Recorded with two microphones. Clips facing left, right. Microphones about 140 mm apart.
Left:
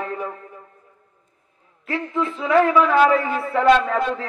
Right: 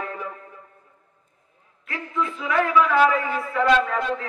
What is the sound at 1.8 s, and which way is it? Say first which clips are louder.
A man's voice: left 4 dB; 30° left (ahead or behind).